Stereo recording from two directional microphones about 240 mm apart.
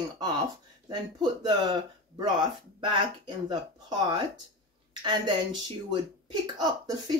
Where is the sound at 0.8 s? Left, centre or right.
Centre.